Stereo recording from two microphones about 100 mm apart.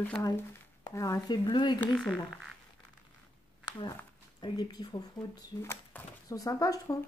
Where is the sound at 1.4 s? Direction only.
50° left (ahead or behind).